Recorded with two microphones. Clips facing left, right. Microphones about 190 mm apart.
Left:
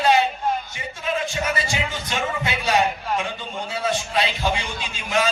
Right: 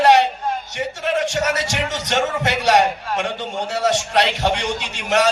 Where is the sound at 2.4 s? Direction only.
80° right.